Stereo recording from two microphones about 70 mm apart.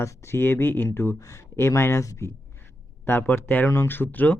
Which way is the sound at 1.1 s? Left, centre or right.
Left.